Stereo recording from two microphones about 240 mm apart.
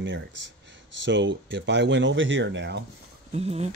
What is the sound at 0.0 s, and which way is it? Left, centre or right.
Speech, right.